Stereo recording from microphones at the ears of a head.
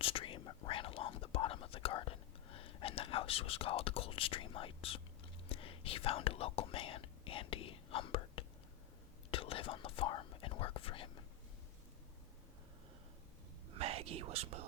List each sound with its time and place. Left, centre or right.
0.0 s speech: left
5.5 s whispering: left
13.7 s whispering: right